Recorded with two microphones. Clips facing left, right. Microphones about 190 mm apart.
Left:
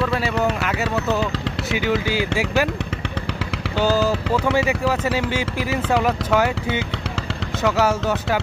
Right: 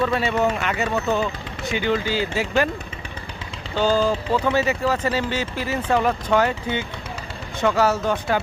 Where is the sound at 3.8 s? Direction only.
5° left (ahead or behind).